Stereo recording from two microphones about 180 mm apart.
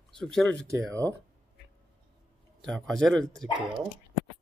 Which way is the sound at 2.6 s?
Centre (ahead or behind).